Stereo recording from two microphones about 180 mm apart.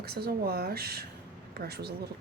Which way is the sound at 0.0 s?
60° right (ahead or behind).